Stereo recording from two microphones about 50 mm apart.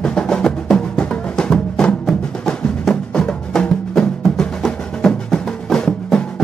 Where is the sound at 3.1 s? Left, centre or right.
Centre.